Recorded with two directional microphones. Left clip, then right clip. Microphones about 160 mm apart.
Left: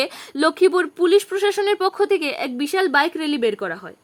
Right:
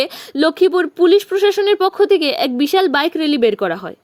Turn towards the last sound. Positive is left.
turn(degrees=-35)  # may be behind; listen again after turning